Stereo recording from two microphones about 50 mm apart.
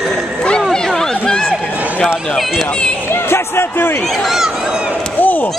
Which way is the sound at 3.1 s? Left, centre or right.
Left.